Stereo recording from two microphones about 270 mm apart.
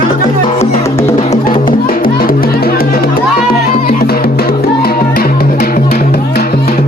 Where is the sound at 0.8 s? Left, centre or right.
Centre.